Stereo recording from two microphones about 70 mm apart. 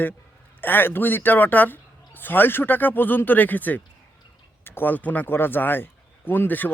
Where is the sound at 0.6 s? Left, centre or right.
Left.